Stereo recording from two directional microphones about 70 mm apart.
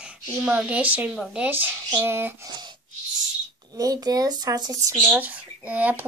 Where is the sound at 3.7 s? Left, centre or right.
Right.